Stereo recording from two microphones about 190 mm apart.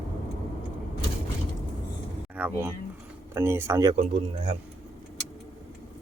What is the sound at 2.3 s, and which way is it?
Speech, 10° right (ahead or behind).